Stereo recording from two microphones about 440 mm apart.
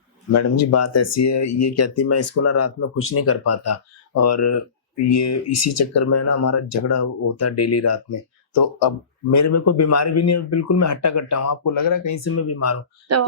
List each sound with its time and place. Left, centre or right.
0.3 s speech: left
8.5 s speech: left
9.3 s speech: left
13.1 s speech: right